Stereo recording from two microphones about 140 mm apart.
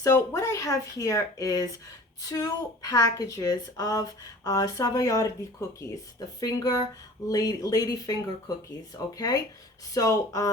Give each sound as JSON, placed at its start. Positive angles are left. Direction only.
{"t": 0.0, "sound": "a woman's voice", "side_deg": 20}